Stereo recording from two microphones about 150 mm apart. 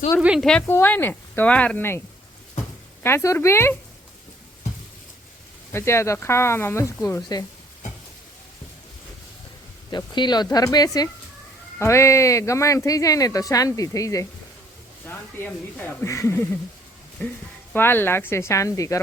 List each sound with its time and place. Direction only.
0.2 s a woman's voice: 5° right (ahead or behind)
0.7 s speech: 15° left (ahead or behind)
3.0 s speech: 15° left (ahead or behind)
5.7 s speech: 20° left (ahead or behind)
9.9 s speech: 30° left (ahead or behind)